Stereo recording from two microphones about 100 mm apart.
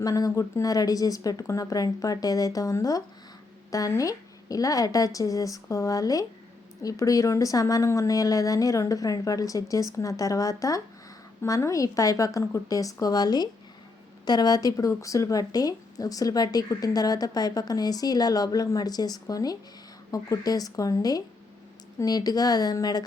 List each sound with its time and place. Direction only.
0.0 s speech: 35° left (ahead or behind)